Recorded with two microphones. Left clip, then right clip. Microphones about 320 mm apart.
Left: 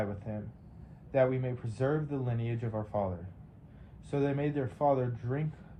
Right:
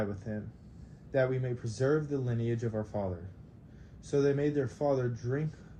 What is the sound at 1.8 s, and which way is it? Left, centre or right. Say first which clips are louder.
Speech: right 2 dB; left.